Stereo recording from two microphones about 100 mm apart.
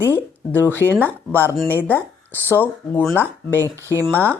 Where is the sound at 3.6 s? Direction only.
30° right (ahead or behind).